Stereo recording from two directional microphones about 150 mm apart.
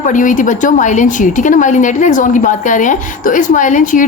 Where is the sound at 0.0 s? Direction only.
60° left (ahead or behind).